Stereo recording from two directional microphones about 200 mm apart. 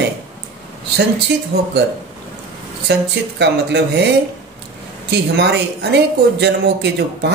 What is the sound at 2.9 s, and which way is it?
Speech, 55° right (ahead or behind).